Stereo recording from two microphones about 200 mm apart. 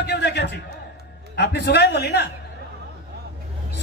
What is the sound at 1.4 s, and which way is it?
Speech, 55° left (ahead or behind).